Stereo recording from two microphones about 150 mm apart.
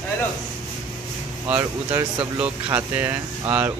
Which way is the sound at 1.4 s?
15° right (ahead or behind).